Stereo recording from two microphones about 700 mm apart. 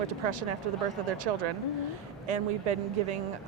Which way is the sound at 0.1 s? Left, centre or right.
Right.